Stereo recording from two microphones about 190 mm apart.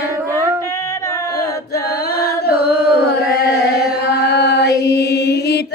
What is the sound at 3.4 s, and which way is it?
Chant, 60° left (ahead or behind).